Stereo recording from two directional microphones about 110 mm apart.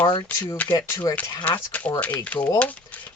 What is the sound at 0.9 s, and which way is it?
Speech, 30° left (ahead or behind).